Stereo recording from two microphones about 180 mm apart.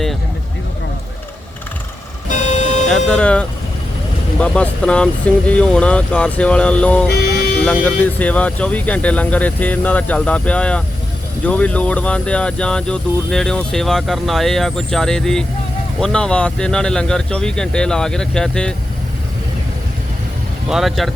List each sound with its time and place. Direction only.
2.3 s music: 40° left (ahead or behind)
3.1 s speech: 5° left (ahead or behind)
20.7 s speech: centre (ahead or behind)